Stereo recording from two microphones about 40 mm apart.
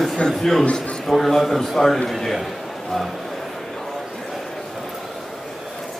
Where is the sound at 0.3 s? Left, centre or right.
Centre.